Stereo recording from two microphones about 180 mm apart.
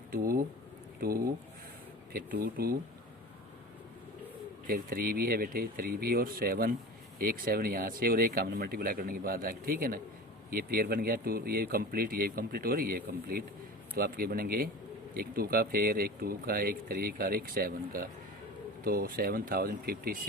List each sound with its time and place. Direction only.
0.1 s speech: 55° right (ahead or behind)
4.6 s speech: 55° right (ahead or behind)